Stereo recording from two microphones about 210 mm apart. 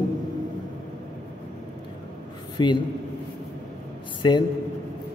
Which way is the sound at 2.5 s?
20° left (ahead or behind).